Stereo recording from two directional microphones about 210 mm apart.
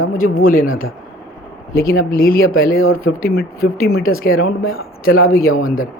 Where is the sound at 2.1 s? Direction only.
45° left (ahead or behind).